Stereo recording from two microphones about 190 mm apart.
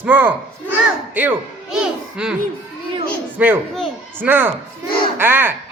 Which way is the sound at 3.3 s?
10° right (ahead or behind).